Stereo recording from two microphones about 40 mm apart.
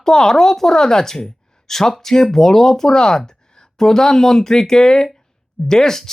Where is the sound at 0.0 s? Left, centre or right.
Centre.